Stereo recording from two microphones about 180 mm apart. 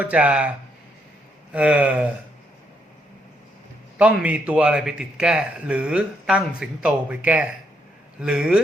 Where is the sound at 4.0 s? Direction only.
10° right (ahead or behind).